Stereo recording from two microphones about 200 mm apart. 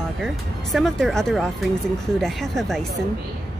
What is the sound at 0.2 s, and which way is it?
Speech, centre (ahead or behind).